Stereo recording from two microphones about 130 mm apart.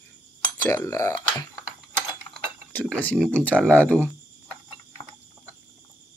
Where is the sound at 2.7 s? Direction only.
10° left (ahead or behind).